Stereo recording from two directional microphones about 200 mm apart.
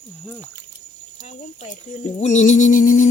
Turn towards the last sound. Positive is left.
turn(degrees=40)  # may be behind; listen again after turning